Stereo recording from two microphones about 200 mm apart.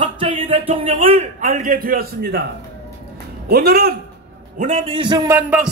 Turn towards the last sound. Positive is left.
turn(degrees=-5)  # may be behind; listen again after turning